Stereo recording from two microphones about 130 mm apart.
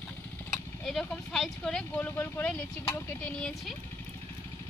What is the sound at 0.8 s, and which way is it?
Speech, 5° left (ahead or behind).